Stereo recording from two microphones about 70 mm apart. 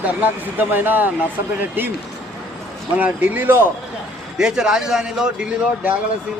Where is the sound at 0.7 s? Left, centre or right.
Right.